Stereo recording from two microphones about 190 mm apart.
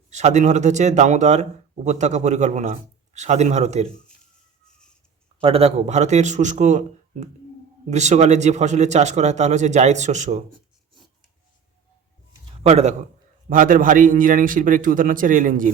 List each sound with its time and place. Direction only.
0.1 s speech: 35° right (ahead or behind)
5.4 s speech: 30° right (ahead or behind)
12.5 s a man's voice: 35° right (ahead or behind)